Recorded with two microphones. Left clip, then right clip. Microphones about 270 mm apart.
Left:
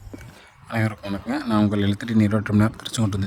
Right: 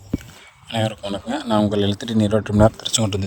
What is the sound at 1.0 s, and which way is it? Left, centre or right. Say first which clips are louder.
Speech: right 2 dB; centre.